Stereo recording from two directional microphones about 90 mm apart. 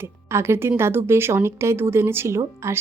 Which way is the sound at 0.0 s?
30° right (ahead or behind).